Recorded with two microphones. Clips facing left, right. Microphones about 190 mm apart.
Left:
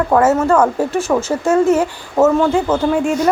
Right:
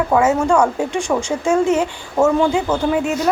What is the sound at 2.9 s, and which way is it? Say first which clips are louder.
Speech: left 2 dB; 5° right (ahead or behind).